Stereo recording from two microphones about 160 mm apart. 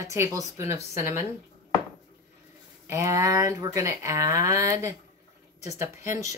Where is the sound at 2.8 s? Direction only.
20° right (ahead or behind).